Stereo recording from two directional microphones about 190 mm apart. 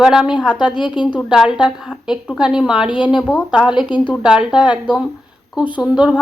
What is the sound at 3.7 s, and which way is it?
Speech, 25° left (ahead or behind).